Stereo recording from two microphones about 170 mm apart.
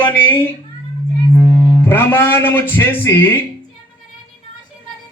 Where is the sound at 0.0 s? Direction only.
10° left (ahead or behind).